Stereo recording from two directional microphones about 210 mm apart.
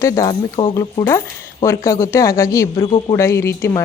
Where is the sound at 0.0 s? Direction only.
15° left (ahead or behind).